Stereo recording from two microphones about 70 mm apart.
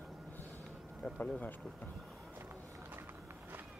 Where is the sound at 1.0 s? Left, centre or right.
Centre.